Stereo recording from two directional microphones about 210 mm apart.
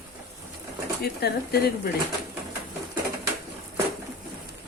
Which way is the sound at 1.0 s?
50° left (ahead or behind).